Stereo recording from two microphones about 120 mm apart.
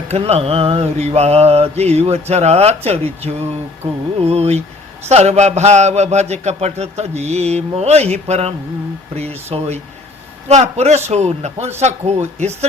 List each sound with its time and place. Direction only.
0.1 s mantra: 60° right (ahead or behind)
4.2 s speech: 60° right (ahead or behind)
5.0 s mantra: 65° right (ahead or behind)
10.5 s speech: 65° right (ahead or behind)
11.1 s mantra: 65° right (ahead or behind)
11.8 s speech: 65° right (ahead or behind)